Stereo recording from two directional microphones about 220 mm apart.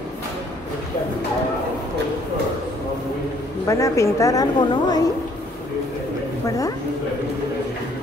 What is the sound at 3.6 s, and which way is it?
A woman's voice, 15° left (ahead or behind).